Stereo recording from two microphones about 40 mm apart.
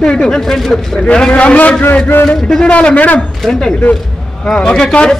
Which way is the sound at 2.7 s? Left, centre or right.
Left.